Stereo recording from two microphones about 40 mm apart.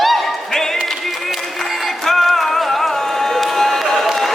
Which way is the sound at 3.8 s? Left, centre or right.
Centre.